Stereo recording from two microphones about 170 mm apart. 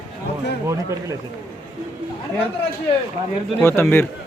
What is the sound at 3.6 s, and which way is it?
Speech, 15° left (ahead or behind).